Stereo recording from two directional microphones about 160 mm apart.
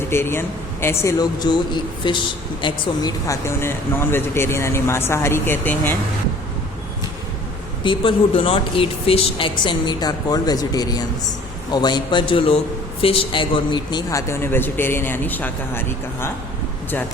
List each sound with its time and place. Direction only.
0.1 s speech: 15° left (ahead or behind)
7.9 s a man's voice: 35° left (ahead or behind); by 15.8 s 10° left (ahead or behind)